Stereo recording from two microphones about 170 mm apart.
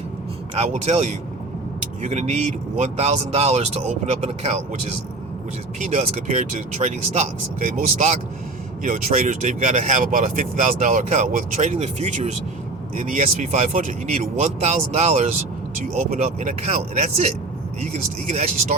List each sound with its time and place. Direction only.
0.5 s speech: 40° right (ahead or behind)
5.8 s speech: 45° right (ahead or behind)